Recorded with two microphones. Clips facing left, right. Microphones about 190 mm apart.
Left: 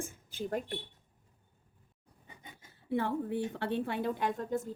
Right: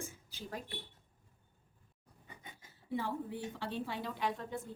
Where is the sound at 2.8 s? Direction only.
60° left (ahead or behind); by 4.6 s 45° left (ahead or behind).